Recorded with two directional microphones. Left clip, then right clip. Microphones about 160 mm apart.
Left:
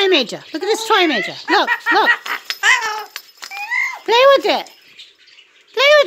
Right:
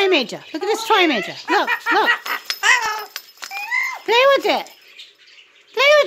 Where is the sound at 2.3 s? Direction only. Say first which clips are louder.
Left 2 dB; 25° right (ahead or behind).